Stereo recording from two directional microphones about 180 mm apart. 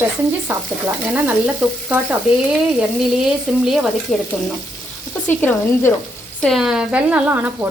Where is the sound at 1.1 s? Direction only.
10° right (ahead or behind).